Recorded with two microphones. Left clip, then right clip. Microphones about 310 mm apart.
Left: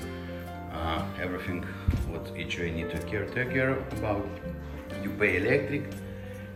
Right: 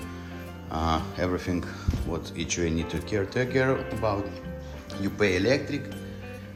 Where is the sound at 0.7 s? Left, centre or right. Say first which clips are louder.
Right 5 dB; centre.